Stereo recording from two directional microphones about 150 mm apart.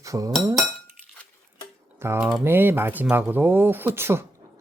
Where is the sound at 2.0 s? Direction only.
15° right (ahead or behind).